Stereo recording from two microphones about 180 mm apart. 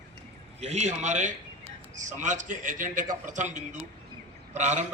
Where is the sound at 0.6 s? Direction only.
40° right (ahead or behind).